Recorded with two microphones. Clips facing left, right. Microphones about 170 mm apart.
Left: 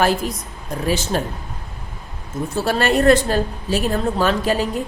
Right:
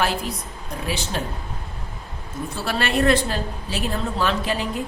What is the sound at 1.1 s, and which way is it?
Speech, 45° left (ahead or behind).